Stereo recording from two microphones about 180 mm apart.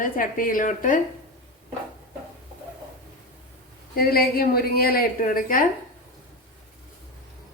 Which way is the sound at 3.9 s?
55° left (ahead or behind).